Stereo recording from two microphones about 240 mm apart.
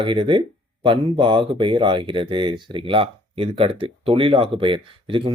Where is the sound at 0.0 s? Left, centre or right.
Right.